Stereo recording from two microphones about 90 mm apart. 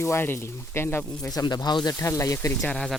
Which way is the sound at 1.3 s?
45° left (ahead or behind).